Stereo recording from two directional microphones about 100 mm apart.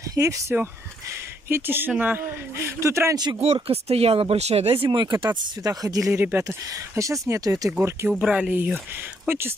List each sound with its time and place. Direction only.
0.1 s speech: 35° right (ahead or behind)
1.5 s a woman's voice: 20° right (ahead or behind)
3.5 s speech: 80° right
4.8 s speech: 50° right (ahead or behind)
6.1 s a woman's voice: 20° right (ahead or behind)
7.0 s speech: 35° right (ahead or behind)
8.1 s speech: 10° right (ahead or behind)